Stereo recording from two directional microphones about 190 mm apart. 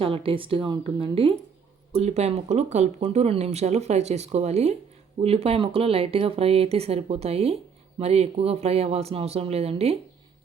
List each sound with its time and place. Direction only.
0.0 s speech: 30° right (ahead or behind)